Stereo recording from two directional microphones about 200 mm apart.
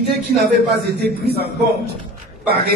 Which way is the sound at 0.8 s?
55° right (ahead or behind).